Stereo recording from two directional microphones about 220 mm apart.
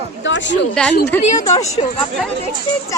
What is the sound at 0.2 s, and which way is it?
Speech, 55° left (ahead or behind).